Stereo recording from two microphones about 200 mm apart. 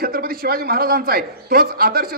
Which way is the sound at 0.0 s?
50° right (ahead or behind).